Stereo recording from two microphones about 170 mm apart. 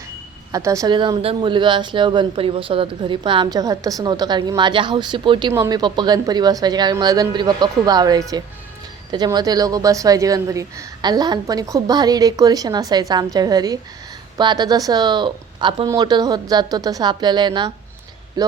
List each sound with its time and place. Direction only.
0.5 s speech: 20° right (ahead or behind)